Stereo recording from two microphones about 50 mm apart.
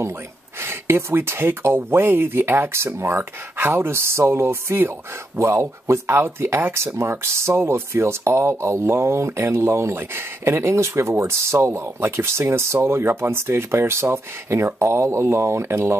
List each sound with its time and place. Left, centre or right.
0.6 s speech: right
2.7 s speech: right
5.4 s speech: right
14.6 s speech: right